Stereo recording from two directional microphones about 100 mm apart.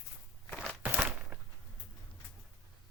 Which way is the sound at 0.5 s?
10° right (ahead or behind).